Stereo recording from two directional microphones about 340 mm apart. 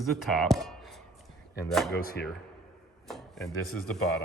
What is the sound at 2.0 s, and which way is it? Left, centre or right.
Speech, left.